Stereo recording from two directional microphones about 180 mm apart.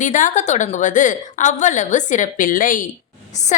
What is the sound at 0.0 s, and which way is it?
A woman's voice, 45° left (ahead or behind).